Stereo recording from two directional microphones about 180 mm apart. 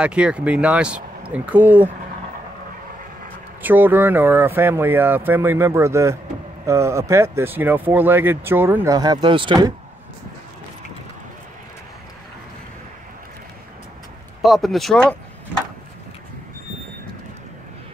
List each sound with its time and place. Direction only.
0.0 s speech: 5° right (ahead or behind)
3.6 s speech: 10° right (ahead or behind)
14.4 s speech: centre (ahead or behind)